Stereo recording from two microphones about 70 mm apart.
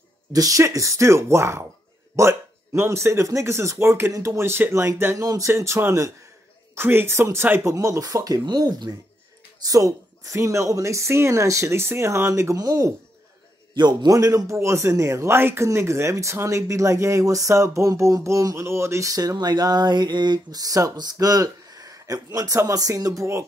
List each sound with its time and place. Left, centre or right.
0.3 s a man's voice: right
5.5 s speech: right
7.7 s speech: right
8.5 s speech: right
9.7 s a man's voice: right
12.5 s speech: right
13.7 s speech: right
14.1 s a man's voice: right